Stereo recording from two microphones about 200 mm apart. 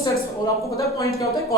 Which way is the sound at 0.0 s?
15° left (ahead or behind).